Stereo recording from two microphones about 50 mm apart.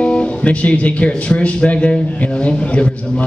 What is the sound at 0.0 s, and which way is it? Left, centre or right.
A man's voice, left.